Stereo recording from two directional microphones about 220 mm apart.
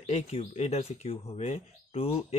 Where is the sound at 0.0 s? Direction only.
30° left (ahead or behind).